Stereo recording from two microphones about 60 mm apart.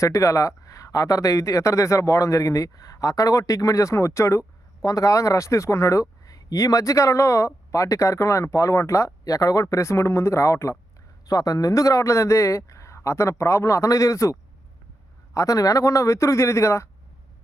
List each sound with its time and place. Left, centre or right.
0.0 s speech: left
4.8 s speech: left
11.3 s speech: left
15.4 s speech: left